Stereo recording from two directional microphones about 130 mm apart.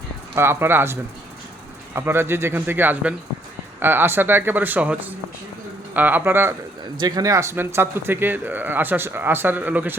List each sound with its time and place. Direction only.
0.3 s speech: 20° right (ahead or behind)
2.0 s speech: 20° right (ahead or behind)
7.0 s speech: 30° right (ahead or behind)